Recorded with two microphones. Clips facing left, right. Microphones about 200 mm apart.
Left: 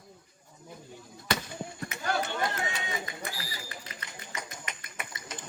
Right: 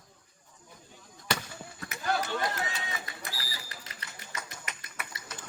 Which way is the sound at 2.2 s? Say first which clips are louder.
Even; 25° left (ahead or behind).